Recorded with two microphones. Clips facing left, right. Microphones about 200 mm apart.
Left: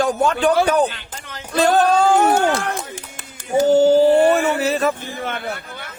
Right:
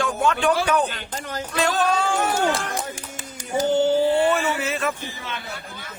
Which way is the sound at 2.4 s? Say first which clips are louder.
Left 3 dB; 55° left (ahead or behind).